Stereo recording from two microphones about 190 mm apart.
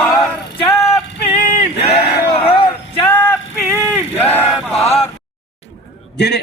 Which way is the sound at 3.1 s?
10° left (ahead or behind).